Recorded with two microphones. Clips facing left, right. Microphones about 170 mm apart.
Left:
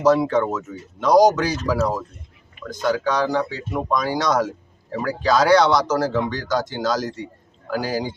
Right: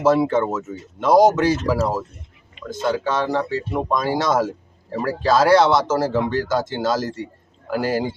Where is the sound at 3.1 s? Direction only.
Centre (ahead or behind).